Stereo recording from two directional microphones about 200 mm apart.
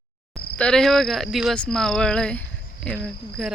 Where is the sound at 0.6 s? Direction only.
5° left (ahead or behind).